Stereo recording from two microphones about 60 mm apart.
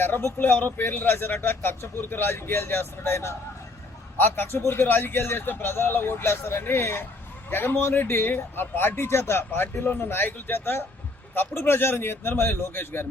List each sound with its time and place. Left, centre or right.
0.0 s a man's voice: left